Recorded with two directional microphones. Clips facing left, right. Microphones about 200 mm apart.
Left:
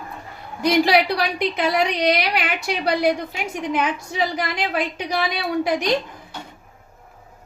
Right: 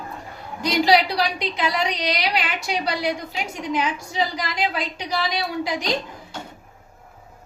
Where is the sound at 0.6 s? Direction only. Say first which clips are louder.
Left 2 dB; 55° left (ahead or behind).